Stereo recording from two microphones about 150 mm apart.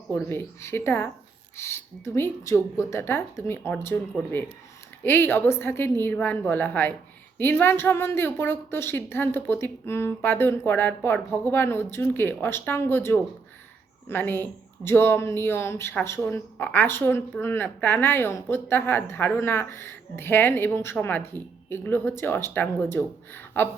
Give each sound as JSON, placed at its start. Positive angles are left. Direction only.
{"t": 0.1, "sound": "speech", "side_deg": 15}
{"t": 5.0, "sound": "speech", "side_deg": 15}